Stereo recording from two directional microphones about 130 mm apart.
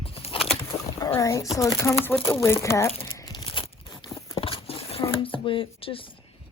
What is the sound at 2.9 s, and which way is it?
Crumpling, 45° left (ahead or behind).